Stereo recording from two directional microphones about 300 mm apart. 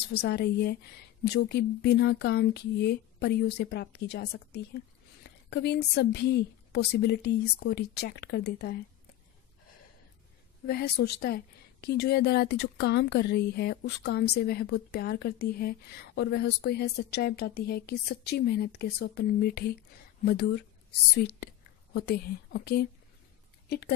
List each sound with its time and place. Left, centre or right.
0.2 s a woman's voice: left
10.7 s a woman's voice: left